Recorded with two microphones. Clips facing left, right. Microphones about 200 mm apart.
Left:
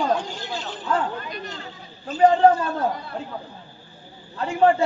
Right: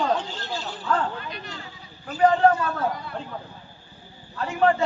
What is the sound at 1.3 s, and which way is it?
Speech, 45° left (ahead or behind).